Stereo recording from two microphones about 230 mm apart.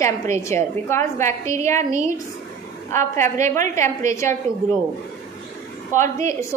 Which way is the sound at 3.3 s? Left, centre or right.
Right.